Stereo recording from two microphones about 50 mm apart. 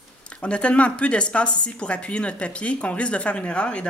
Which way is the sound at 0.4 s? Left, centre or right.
Left.